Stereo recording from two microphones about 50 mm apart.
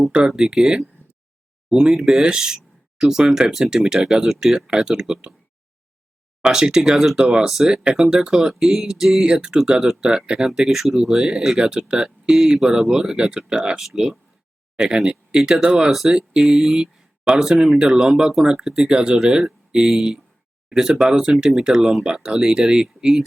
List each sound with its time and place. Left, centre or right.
0.3 s speech: centre
1.0 s a sound: left
1.7 s speech: centre
6.4 s speech: centre
7.2 s speech: centre
7.5 s speech: centre
11.5 s speech: centre
18.9 s speech: centre